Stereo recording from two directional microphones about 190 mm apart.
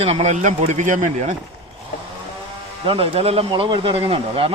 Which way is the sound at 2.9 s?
30° right (ahead or behind).